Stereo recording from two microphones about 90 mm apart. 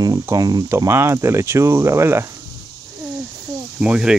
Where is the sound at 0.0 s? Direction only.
45° right (ahead or behind).